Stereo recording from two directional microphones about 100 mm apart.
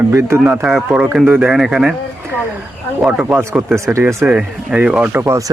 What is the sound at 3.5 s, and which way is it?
Speech, 30° right (ahead or behind).